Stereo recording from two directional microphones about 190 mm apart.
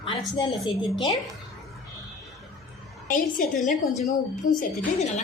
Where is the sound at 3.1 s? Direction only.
45° left (ahead or behind).